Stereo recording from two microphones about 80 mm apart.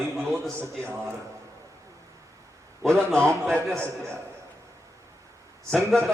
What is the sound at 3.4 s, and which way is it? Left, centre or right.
Speech, centre.